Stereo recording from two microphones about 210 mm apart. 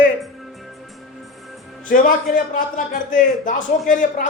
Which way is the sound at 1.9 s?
40° left (ahead or behind).